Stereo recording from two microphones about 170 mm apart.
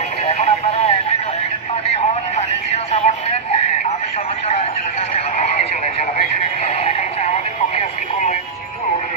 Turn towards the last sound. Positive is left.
turn(degrees=40)  # may be behind; listen again after turning